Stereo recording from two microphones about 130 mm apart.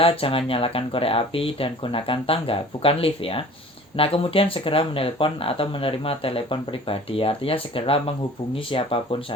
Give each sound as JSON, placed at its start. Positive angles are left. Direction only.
{"t": 0.0, "sound": "speech", "side_deg": 45}